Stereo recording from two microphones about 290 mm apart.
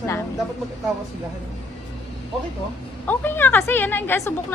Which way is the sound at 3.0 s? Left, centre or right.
Centre.